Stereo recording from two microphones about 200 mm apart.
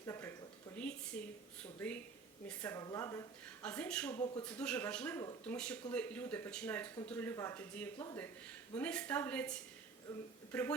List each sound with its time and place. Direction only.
0.0 s a sound: 15° left (ahead or behind)
2.5 s speech: 10° left (ahead or behind)
3.6 s speech: 5° left (ahead or behind)